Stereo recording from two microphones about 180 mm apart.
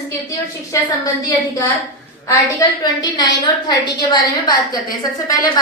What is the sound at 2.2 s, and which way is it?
A woman's voice, 20° left (ahead or behind).